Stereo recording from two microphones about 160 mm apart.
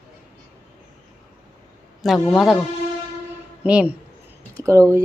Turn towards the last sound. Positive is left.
turn(degrees=-20)  # may be behind; listen again after turning